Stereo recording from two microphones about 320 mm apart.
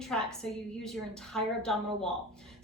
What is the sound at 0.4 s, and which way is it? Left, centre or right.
A woman's voice, centre.